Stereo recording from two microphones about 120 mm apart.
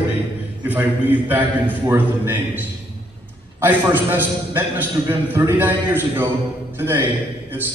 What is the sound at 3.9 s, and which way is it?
A man's voice, 15° right (ahead or behind).